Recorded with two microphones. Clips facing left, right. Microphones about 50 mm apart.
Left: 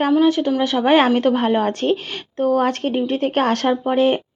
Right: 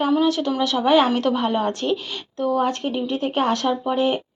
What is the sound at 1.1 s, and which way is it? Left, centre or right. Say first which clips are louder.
Speech: left 4 dB; left.